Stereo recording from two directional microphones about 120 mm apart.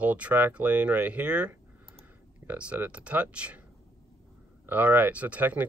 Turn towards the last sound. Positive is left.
turn(degrees=-15)  # may be behind; listen again after turning